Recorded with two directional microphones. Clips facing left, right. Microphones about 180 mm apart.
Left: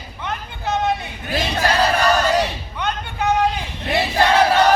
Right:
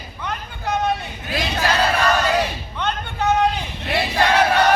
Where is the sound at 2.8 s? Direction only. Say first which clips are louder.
Even; 10° left (ahead or behind).